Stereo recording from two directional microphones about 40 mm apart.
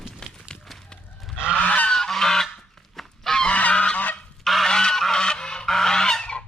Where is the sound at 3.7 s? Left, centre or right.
Left.